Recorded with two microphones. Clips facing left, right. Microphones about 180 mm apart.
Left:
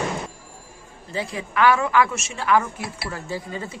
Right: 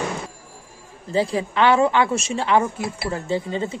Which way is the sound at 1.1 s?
30° right (ahead or behind).